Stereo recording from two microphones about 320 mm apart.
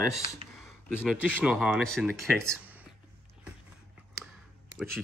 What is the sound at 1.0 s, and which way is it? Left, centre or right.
Speech, centre.